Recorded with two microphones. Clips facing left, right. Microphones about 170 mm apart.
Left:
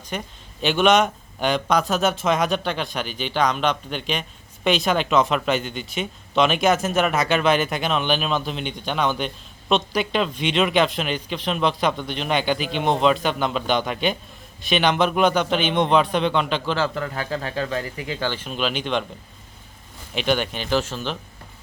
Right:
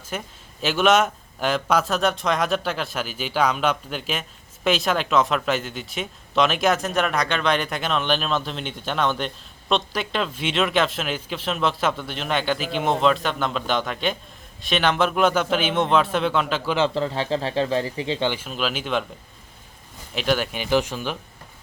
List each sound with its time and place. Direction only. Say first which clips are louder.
0.1 s a man's voice: left 1 dB; centre (ahead or behind)
16.7 s a man's voice: right 3 dB; 25° right (ahead or behind)
18.3 s a man's voice: even; 5° right (ahead or behind)
20.1 s speech: left 1 dB; centre (ahead or behind)